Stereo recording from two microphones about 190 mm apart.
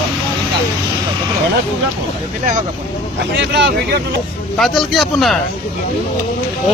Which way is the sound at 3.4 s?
65° right (ahead or behind).